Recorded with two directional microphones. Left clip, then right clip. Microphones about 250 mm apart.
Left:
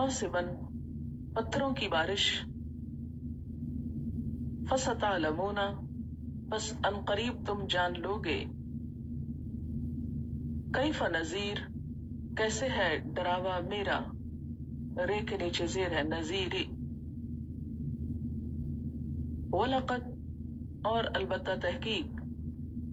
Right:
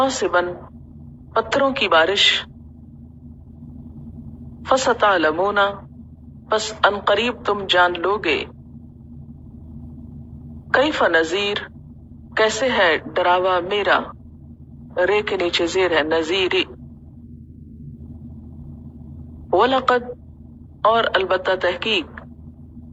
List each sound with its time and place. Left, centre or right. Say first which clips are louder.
0.0 s a woman's voice: right 14 dB; right
4.6 s a woman's voice: right 15 dB; right
10.7 s a woman's voice: right 15 dB; right
19.5 s a man's voice: right 15 dB; right